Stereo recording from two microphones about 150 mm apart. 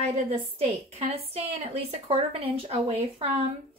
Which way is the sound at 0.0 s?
45° right (ahead or behind).